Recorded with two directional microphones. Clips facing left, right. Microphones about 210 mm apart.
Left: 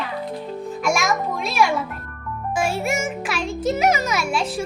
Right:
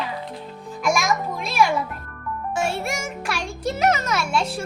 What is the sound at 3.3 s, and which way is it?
Speech, 5° left (ahead or behind).